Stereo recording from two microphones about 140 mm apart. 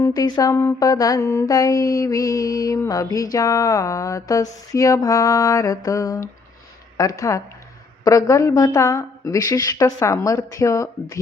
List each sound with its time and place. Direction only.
0.0 s mantra: 25° left (ahead or behind)